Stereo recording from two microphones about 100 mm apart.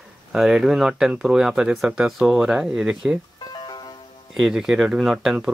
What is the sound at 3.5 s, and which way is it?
Music, 45° left (ahead or behind).